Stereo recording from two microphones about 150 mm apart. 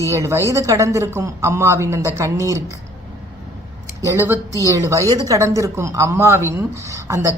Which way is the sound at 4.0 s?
20° right (ahead or behind).